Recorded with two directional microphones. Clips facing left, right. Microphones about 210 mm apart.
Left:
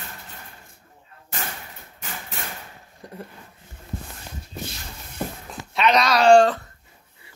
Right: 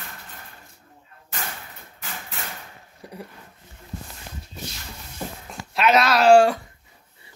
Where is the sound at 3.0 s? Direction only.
5° right (ahead or behind).